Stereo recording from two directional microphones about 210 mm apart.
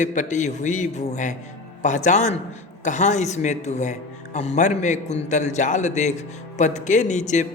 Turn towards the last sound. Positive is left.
turn(degrees=35)  # may be behind; listen again after turning